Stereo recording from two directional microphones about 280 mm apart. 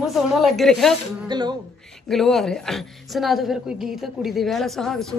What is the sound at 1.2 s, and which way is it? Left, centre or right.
Speech, centre.